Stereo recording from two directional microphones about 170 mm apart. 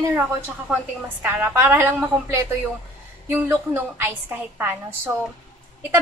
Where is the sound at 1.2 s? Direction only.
15° right (ahead or behind).